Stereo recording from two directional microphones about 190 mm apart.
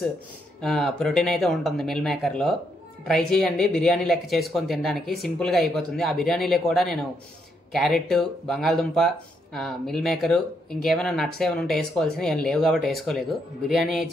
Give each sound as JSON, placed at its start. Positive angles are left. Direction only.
{"t": 0.6, "sound": "speech", "side_deg": 0}
{"t": 5.0, "sound": "speech", "side_deg": 55}
{"t": 5.4, "sound": "speech", "side_deg": 0}